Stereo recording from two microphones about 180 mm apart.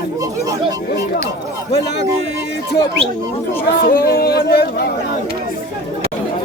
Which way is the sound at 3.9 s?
55° left (ahead or behind).